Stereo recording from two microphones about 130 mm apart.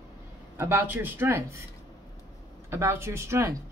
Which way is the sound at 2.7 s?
20° right (ahead or behind).